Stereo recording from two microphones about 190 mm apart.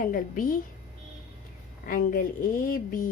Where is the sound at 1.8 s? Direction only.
50° left (ahead or behind).